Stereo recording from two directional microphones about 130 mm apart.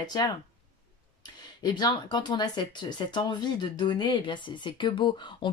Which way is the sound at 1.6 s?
35° left (ahead or behind).